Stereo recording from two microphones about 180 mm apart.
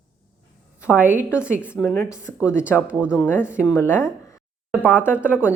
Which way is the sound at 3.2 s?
10° left (ahead or behind).